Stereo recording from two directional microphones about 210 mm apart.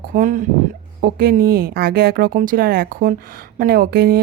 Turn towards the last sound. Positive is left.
turn(degrees=-45)  # may be behind; listen again after turning